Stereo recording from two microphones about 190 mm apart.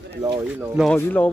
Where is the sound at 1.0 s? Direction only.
5° left (ahead or behind).